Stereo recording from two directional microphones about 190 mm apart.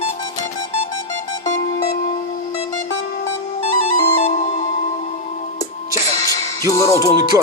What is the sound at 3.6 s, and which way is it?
Music, 40° left (ahead or behind).